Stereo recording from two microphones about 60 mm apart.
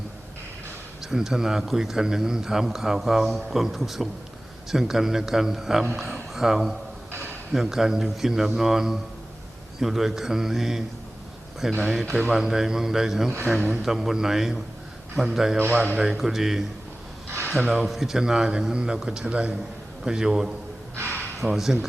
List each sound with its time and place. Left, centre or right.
1.0 s a man's voice: centre
15.5 s a man's voice: right
16.0 s speech: centre
17.7 s speech: centre
20.9 s a sound: right
21.3 s a man's voice: centre